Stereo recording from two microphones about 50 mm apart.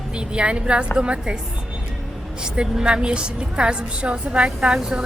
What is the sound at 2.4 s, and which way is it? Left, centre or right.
A woman's voice, centre.